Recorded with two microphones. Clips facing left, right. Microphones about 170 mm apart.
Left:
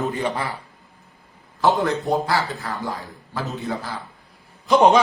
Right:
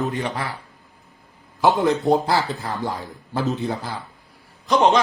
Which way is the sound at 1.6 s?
20° right (ahead or behind).